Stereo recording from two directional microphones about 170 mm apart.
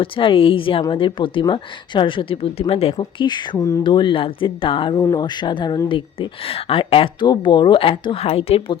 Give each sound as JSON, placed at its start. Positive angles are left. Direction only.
{"t": 0.0, "sound": "a woman's voice", "side_deg": 30}